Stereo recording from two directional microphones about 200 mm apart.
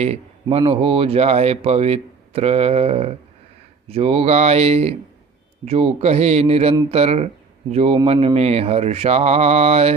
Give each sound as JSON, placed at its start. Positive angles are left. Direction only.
{"t": 0.0, "sound": "speech", "side_deg": -30}